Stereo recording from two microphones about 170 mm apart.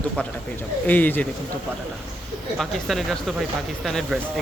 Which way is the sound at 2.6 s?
Centre (ahead or behind).